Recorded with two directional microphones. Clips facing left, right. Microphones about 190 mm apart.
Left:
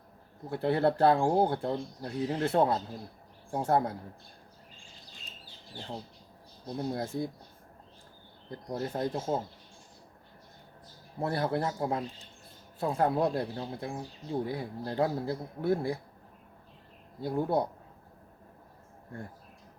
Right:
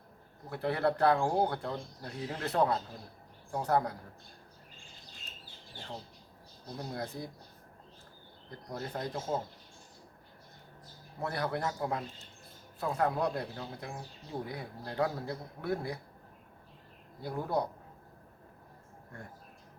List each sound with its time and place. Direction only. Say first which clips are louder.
0.5 s speech: left 4 dB; 30° left (ahead or behind)
6.7 s speech: left 6 dB; 25° left (ahead or behind)
8.4 s speech: left 6 dB; 25° left (ahead or behind)
11.2 s speech: left 4 dB; 30° left (ahead or behind)
17.2 s speech: left 4 dB; 25° left (ahead or behind)